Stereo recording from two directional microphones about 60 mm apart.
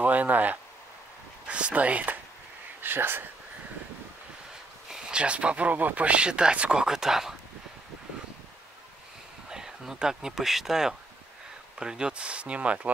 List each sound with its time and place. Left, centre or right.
0.0 s speech: right
2.8 s speech: right
4.8 s speech: centre
9.5 s speech: centre